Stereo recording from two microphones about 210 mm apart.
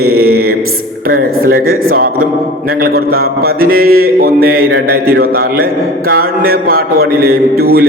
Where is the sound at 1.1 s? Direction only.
45° right (ahead or behind).